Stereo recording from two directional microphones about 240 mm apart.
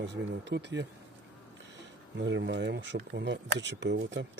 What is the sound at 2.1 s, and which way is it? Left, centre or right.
Speech, right.